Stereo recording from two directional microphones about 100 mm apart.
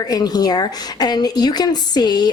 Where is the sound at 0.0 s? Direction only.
40° left (ahead or behind).